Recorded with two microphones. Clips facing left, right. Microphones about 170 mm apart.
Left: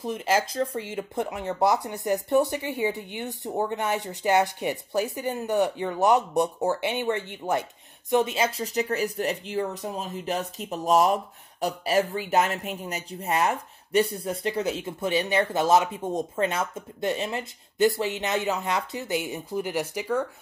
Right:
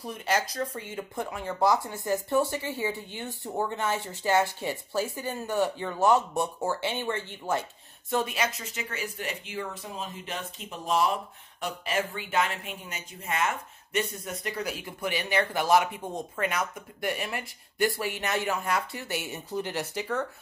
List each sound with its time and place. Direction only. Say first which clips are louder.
0.0 s speech: left 4 dB; 25° left (ahead or behind)